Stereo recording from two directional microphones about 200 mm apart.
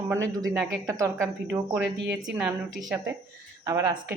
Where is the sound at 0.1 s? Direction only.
15° right (ahead or behind).